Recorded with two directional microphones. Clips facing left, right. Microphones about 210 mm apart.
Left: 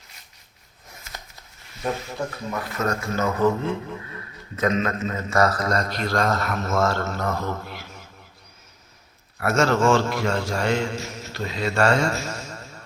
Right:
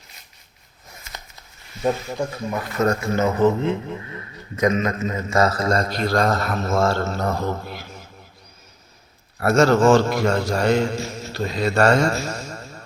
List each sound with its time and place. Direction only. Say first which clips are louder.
1.8 s a man's voice: right 5 dB; 15° right (ahead or behind); by 7.8 s 35° right (ahead or behind)
9.4 s a man's voice: right 4 dB; 35° right (ahead or behind)